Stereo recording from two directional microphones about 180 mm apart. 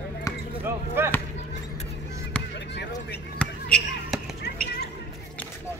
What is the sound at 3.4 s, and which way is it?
Basketball bounce, 5° left (ahead or behind).